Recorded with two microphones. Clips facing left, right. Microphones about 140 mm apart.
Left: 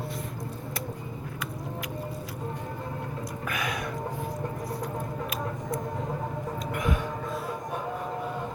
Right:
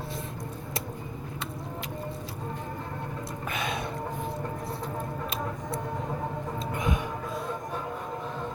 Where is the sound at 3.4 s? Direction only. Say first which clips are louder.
Even; 25° right (ahead or behind).